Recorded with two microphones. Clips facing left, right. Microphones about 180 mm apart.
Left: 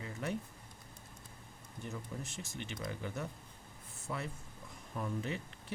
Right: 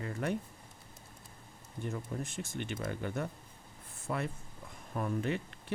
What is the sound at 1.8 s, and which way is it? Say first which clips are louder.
Speech: right 5 dB; 55° right (ahead or behind).